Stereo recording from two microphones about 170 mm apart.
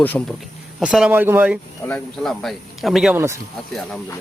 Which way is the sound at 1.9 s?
5° left (ahead or behind).